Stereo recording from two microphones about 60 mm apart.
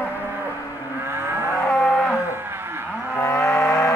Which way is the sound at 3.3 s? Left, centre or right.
Left.